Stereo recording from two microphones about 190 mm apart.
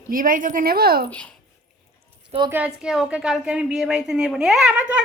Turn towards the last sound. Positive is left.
turn(degrees=-5)  # may be behind; listen again after turning